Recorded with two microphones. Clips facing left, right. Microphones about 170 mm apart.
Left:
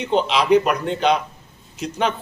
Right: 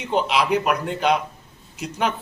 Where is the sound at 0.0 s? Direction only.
5° right (ahead or behind).